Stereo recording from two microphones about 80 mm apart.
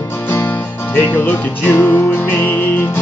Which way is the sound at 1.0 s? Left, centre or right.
Left.